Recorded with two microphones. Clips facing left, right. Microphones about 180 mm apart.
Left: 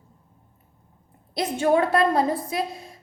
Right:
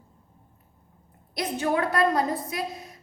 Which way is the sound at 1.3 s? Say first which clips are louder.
Left 5 dB; 25° left (ahead or behind).